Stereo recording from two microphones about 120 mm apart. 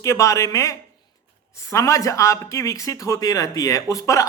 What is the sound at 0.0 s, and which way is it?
Speech, 25° left (ahead or behind).